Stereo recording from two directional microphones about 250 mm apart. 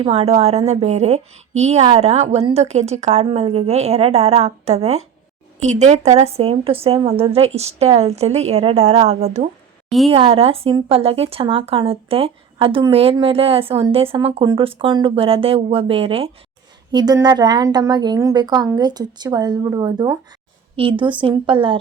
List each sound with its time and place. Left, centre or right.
0.0 s a woman's voice: right